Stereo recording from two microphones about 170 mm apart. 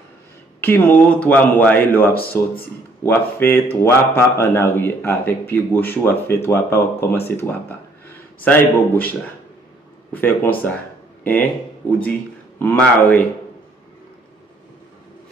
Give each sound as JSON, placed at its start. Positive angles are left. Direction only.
{"t": 0.6, "sound": "speech", "side_deg": 10}
{"t": 10.1, "sound": "speech", "side_deg": 10}
{"t": 11.8, "sound": "speech", "side_deg": 10}